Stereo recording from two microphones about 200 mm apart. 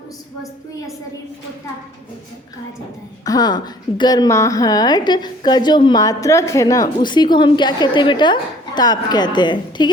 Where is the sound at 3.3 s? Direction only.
20° left (ahead or behind).